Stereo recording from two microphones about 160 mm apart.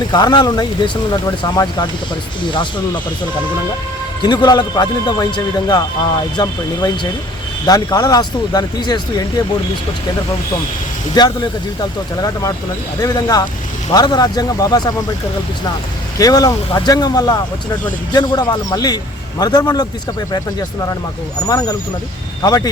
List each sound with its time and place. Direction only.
0.1 s speech: 25° left (ahead or behind)
4.2 s speech: 25° left (ahead or behind)
11.1 s speech: 25° left (ahead or behind)
16.1 s speech: 20° left (ahead or behind)
21.4 s speech: 20° left (ahead or behind)